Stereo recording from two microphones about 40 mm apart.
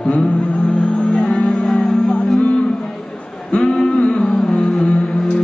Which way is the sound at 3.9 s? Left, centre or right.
Left.